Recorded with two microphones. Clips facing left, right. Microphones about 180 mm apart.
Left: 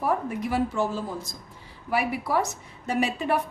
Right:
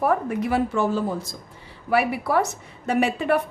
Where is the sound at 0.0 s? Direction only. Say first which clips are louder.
Right 4 dB; 65° right (ahead or behind).